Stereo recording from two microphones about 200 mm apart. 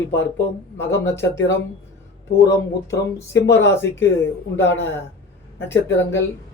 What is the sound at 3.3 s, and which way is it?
Speech, 65° left (ahead or behind).